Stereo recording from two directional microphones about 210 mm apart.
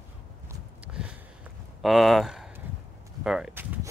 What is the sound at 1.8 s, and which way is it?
Speech, centre (ahead or behind).